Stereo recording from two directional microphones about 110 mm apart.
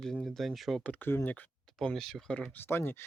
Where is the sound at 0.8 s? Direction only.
15° left (ahead or behind).